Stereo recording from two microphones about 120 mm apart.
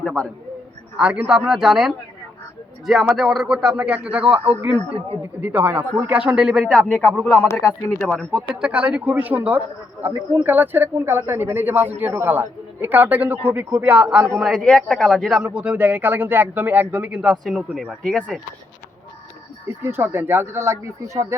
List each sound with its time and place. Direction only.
0.0 s a sound: 10° left (ahead or behind)
0.9 s a man's voice: 10° right (ahead or behind)
19.6 s speech: 20° right (ahead or behind)